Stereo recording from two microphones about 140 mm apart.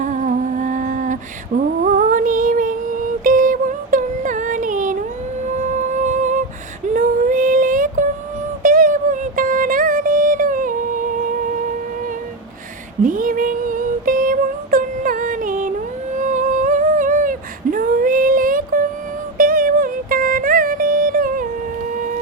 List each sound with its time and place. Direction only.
0.0 s humming: 65° right (ahead or behind)
5.7 s music: 60° right (ahead or behind)
6.9 s female singing: 70° right (ahead or behind)
8.6 s music: 75° right (ahead or behind)
13.0 s female singing: 75° right (ahead or behind)
16.1 s humming: 65° right (ahead or behind)
19.4 s music: 90° right